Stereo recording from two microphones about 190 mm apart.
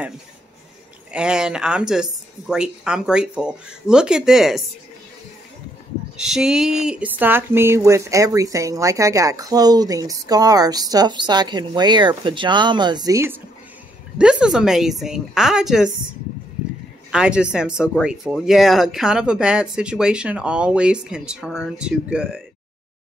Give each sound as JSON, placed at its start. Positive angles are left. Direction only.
{"t": 1.1, "sound": "speech", "side_deg": -5}
{"t": 6.1, "sound": "speech", "side_deg": -5}
{"t": 14.1, "sound": "speech", "side_deg": -5}
{"t": 17.1, "sound": "speech", "side_deg": -5}